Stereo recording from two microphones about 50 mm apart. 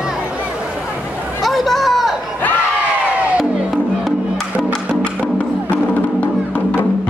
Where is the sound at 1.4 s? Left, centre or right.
Centre.